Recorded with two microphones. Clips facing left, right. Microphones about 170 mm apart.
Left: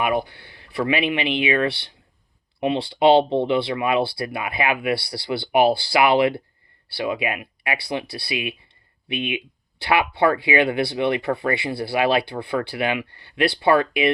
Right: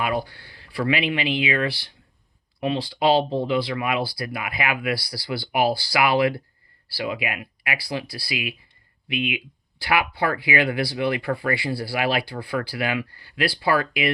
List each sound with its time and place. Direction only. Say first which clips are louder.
0.0 s speech: left 3 dB; 20° left (ahead or behind)